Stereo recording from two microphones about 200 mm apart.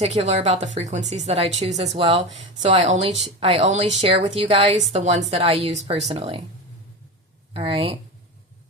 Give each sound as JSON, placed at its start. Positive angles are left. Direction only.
{"t": 0.0, "sound": "a woman's voice", "side_deg": -30}
{"t": 7.5, "sound": "a woman's voice", "side_deg": -30}